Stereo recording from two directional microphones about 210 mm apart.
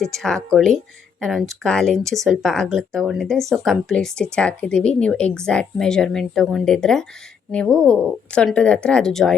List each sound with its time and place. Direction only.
0.0 s speech: centre (ahead or behind)